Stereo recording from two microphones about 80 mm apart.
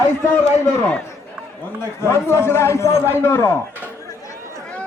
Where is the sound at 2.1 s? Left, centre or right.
Left.